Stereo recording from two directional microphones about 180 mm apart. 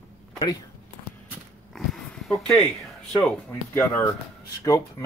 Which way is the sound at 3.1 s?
10° left (ahead or behind).